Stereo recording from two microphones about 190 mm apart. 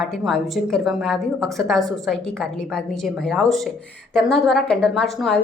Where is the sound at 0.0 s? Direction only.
Centre (ahead or behind).